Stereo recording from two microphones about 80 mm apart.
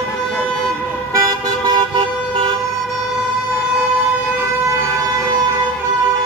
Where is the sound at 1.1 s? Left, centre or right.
Right.